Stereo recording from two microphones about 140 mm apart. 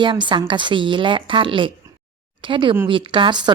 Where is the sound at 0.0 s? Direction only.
35° right (ahead or behind).